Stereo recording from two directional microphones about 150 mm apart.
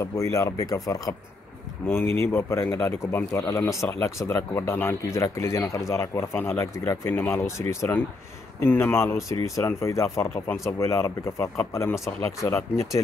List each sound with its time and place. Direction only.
0.0 s speech: 20° left (ahead or behind)